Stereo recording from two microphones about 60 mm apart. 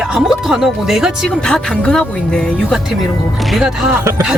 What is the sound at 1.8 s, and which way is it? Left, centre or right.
Speech, centre.